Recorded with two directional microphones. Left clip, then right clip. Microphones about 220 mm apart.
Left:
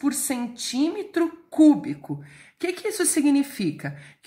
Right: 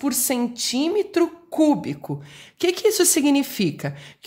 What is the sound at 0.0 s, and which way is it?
A woman's voice, 40° right (ahead or behind).